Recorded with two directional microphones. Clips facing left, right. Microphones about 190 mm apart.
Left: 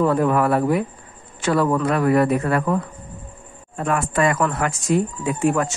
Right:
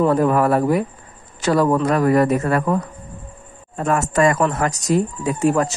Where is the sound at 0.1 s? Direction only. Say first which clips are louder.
Right 2 dB; 40° right (ahead or behind).